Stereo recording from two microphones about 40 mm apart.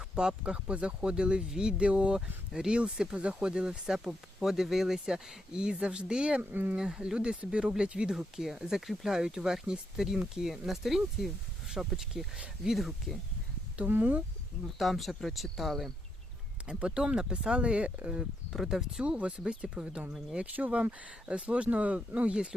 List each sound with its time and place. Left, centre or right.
0.2 s speech: right
1.9 s speech: right
2.1 s speech: centre
6.5 s speech: right
6.7 s speech: right
8.4 s speech: centre
13.8 s speech: right
14.8 s speech: centre
16.6 s speech: right
18.5 s speech: centre
19.0 s speech: right